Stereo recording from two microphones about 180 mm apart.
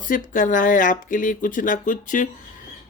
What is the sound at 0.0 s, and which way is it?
Speech, 50° left (ahead or behind).